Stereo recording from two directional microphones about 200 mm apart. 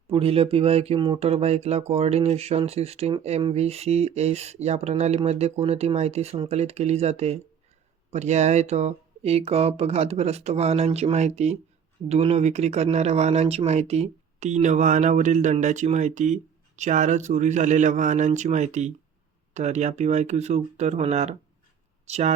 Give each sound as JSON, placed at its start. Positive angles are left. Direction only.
{"t": 0.1, "sound": "speech", "side_deg": -30}